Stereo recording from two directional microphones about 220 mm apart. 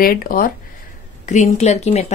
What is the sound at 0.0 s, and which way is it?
Speech, 40° left (ahead or behind).